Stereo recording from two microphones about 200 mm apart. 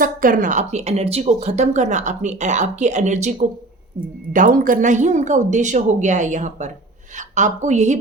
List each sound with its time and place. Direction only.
0.0 s a woman's voice: 40° right (ahead or behind)